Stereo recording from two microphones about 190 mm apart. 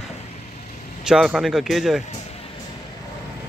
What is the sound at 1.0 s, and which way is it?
Speech, 5° right (ahead or behind).